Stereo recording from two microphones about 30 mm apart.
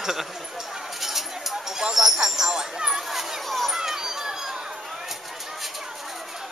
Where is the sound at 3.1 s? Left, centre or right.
Centre.